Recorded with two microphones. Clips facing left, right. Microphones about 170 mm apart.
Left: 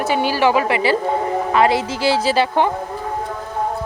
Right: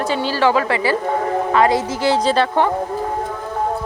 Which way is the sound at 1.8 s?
30° left (ahead or behind).